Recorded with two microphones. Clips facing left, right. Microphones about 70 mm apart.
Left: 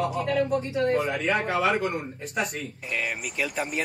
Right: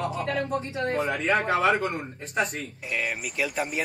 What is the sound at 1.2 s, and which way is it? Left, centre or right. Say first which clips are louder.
Speech: right 2 dB; right.